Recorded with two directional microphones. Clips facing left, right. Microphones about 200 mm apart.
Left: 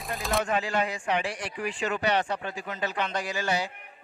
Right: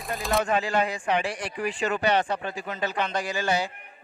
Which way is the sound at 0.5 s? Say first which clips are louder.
Right 3 dB; 35° right (ahead or behind).